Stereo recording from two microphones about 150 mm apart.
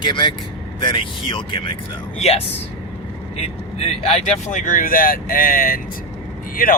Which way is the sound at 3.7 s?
45° left (ahead or behind).